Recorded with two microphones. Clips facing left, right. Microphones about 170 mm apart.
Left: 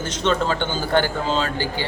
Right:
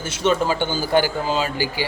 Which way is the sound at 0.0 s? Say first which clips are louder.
Right 1 dB; 10° right (ahead or behind).